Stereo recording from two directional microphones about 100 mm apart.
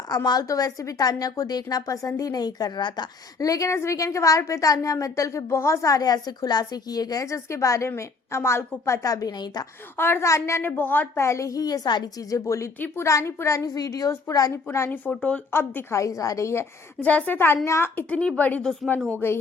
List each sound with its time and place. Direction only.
0.1 s a woman's voice: 40° left (ahead or behind)
10.0 s a woman's voice: 25° left (ahead or behind); by 12.4 s 45° left (ahead or behind)
12.5 s a woman's voice: 30° left (ahead or behind)
14.8 s speech: 15° left (ahead or behind)
15.5 s a woman's voice: 25° left (ahead or behind)